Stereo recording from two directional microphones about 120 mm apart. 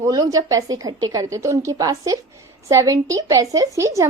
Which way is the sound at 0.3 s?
30° right (ahead or behind).